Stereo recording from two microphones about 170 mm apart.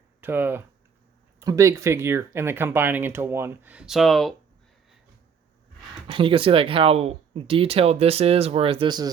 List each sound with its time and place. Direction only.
0.2 s speech: 10° right (ahead or behind)
6.1 s speech: 30° right (ahead or behind)